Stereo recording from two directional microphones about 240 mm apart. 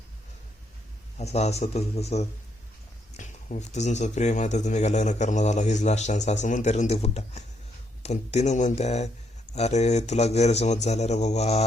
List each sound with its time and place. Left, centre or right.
1.2 s speech: left